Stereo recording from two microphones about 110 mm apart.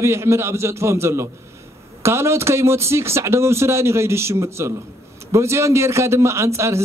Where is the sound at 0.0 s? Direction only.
25° right (ahead or behind).